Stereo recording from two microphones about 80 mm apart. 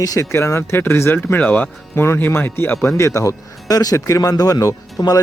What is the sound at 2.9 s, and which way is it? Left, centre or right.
Speech, left.